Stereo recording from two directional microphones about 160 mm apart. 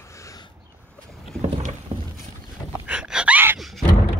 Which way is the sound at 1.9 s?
35° right (ahead or behind).